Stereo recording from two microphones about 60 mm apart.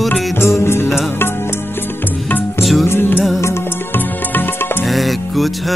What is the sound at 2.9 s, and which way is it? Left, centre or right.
Music, left.